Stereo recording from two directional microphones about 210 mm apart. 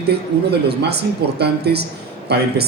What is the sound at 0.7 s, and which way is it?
A man's voice, 50° right (ahead or behind).